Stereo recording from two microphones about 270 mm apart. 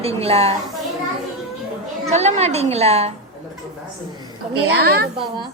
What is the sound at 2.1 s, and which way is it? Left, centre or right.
A woman's voice, right.